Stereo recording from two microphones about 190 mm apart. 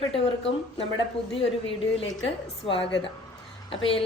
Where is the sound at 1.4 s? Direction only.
30° left (ahead or behind).